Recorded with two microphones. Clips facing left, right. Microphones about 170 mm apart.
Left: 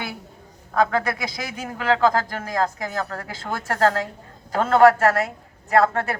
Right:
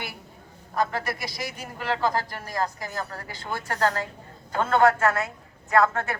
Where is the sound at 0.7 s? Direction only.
70° left (ahead or behind).